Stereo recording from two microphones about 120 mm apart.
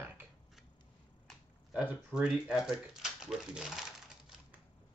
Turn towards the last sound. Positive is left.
turn(degrees=-5)  # may be behind; listen again after turning